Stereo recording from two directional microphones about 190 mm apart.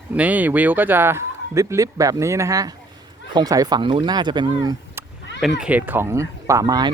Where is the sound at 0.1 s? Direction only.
10° right (ahead or behind).